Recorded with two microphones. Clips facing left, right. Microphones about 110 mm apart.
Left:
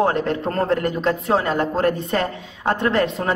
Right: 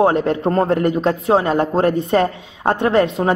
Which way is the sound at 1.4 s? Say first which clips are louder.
Right 3 dB; 35° right (ahead or behind).